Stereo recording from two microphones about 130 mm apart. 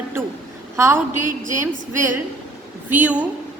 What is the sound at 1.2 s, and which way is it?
Speech, 90° right.